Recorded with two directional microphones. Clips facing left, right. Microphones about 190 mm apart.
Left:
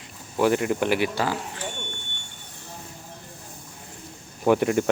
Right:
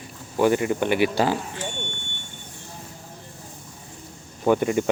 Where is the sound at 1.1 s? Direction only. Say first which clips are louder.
Right 4 dB; 25° right (ahead or behind).